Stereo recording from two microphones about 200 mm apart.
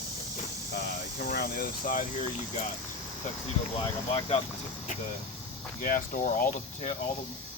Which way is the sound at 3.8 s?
25° left (ahead or behind).